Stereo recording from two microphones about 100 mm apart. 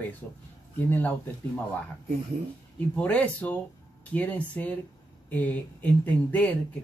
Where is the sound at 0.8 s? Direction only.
20° left (ahead or behind).